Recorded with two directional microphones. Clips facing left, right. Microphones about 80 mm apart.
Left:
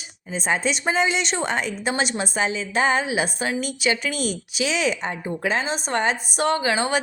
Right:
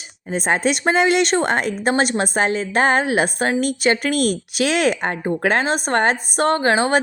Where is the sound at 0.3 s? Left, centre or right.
Right.